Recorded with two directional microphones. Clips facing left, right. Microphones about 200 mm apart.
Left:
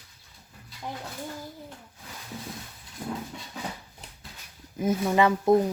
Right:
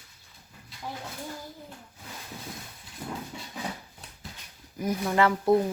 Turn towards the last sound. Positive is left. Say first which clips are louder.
# left 2 dB
turn(degrees=15)  # may be behind; listen again after turning